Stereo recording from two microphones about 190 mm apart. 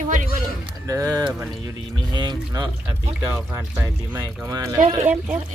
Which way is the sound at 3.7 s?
10° right (ahead or behind).